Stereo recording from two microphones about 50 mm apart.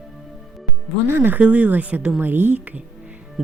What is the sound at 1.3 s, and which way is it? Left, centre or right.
Speech, right.